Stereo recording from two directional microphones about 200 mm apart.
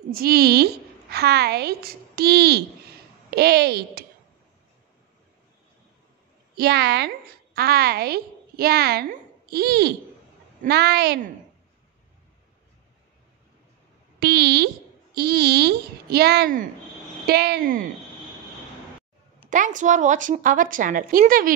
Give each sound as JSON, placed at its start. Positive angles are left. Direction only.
{"t": 0.1, "sound": "a woman's voice", "side_deg": -50}
{"t": 6.5, "sound": "a woman's voice", "side_deg": -55}
{"t": 14.2, "sound": "a woman's voice", "side_deg": -55}
{"t": 19.5, "sound": "a woman's voice", "side_deg": -40}